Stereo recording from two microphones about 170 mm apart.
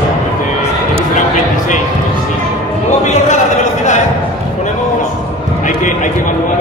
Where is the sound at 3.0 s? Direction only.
45° left (ahead or behind).